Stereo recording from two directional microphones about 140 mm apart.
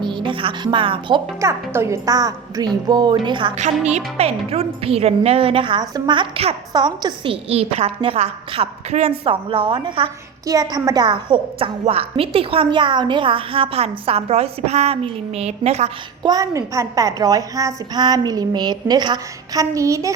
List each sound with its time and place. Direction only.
0.0 s a woman's voice: 35° right (ahead or behind)
1.4 s a child's voice: 20° right (ahead or behind)
3.6 s a woman's voice: 55° right (ahead or behind)
6.7 s a woman's voice: 30° right (ahead or behind)
7.5 s a woman's voice: 45° right (ahead or behind)
10.4 s a woman's voice: 25° right (ahead or behind); by 15.9 s 50° right (ahead or behind)
16.2 s a child's voice: 25° right (ahead or behind)